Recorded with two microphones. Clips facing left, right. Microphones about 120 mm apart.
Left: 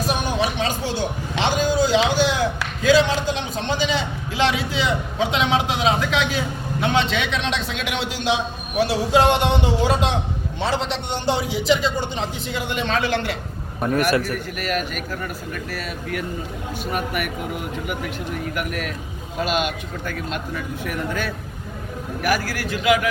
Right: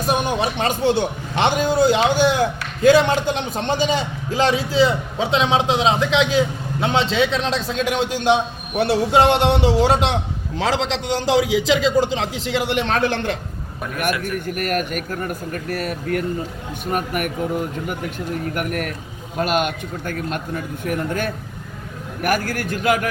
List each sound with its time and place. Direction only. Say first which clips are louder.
0.1 s music: right 5 dB; 55° right (ahead or behind)
1.4 s a man's voice: right 3 dB; 55° right (ahead or behind)
8.8 s speech: right 2 dB; 60° right (ahead or behind)
10.6 s a man's voice: right 3 dB; 90° right; by 13.1 s 60° right (ahead or behind)
13.8 s a man's voice: left 4 dB; 35° left (ahead or behind)
14.3 s speech: right 3 dB; 50° right (ahead or behind)